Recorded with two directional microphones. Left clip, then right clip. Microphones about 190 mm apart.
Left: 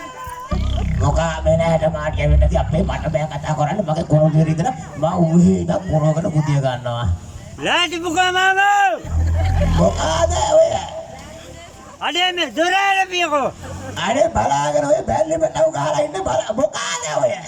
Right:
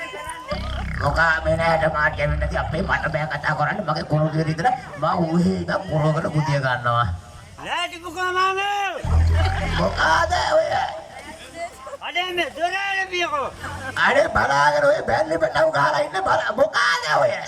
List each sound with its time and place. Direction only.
0.9 s speech: 15° left (ahead or behind)
7.6 s a man's voice: 55° left (ahead or behind); by 9.0 s 70° left (ahead or behind)
9.7 s speech: 15° left (ahead or behind)
12.0 s a man's voice: 60° left (ahead or behind)
13.9 s speech: 10° left (ahead or behind)